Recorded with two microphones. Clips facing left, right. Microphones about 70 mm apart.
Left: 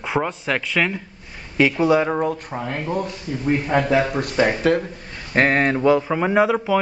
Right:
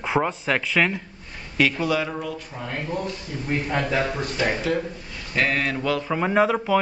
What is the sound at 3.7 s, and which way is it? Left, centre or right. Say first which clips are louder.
Speech: left 5 dB; centre.